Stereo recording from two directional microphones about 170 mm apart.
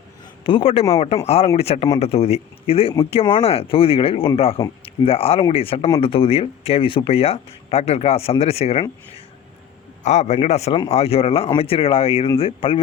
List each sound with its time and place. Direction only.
0.4 s speech: 30° left (ahead or behind)
10.0 s speech: 40° left (ahead or behind)